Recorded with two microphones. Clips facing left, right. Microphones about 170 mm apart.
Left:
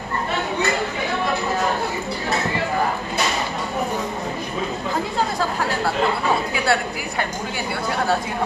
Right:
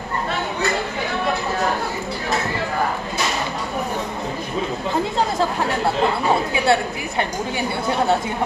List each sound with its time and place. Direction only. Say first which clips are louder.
6.5 s a woman's voice: right 3 dB; 25° right (ahead or behind)